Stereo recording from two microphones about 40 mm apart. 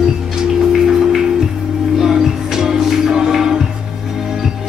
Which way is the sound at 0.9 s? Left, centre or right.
Centre.